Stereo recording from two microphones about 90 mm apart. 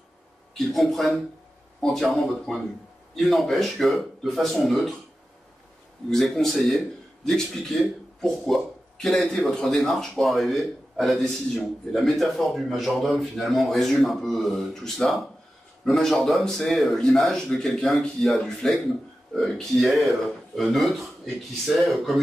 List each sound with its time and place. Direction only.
0.6 s a man's voice: 5° left (ahead or behind)
6.0 s a man's voice: 5° left (ahead or behind)